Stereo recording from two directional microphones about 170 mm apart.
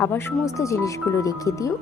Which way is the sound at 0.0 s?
15° left (ahead or behind).